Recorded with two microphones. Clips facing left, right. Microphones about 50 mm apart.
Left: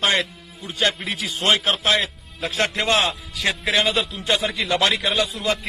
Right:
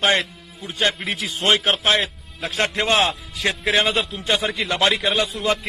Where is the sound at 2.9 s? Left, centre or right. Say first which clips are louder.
Right 2 dB; right.